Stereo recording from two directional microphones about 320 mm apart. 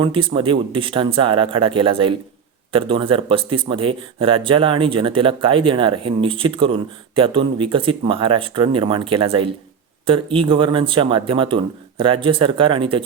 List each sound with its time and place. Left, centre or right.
0.0 s speech: centre